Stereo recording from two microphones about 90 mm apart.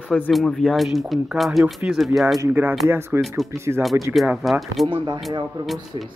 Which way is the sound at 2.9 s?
25° right (ahead or behind).